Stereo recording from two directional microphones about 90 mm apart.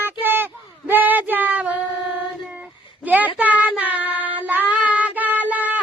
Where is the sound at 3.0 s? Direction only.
20° right (ahead or behind).